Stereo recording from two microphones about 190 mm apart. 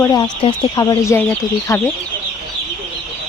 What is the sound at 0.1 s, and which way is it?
Speech, 20° left (ahead or behind).